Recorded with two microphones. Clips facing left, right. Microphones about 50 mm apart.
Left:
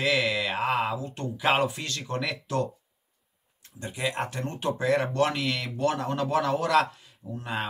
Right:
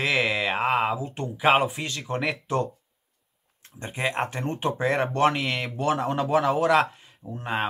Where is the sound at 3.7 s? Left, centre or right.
Right.